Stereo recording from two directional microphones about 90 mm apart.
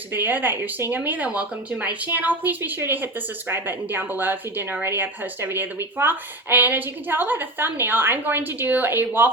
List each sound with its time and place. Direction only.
0.1 s a woman's voice: 20° right (ahead or behind)